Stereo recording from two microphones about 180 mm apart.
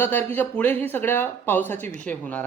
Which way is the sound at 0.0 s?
10° left (ahead or behind).